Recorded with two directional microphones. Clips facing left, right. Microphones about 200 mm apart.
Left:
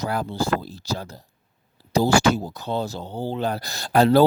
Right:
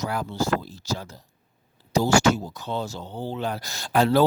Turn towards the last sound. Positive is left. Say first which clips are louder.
# left 4 dB
turn(degrees=35)  # may be behind; listen again after turning